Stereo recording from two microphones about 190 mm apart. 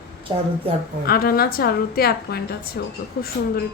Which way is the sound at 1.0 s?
55° left (ahead or behind).